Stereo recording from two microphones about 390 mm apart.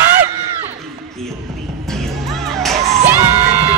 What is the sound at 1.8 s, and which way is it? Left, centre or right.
Music, centre.